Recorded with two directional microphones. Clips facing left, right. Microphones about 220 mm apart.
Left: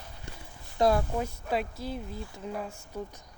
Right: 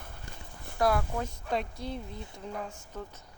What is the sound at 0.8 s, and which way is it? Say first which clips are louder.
Speech: left 3 dB; 25° left (ahead or behind).